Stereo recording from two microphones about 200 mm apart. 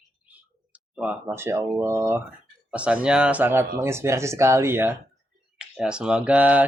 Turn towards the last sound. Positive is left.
turn(degrees=-5)  # may be behind; listen again after turning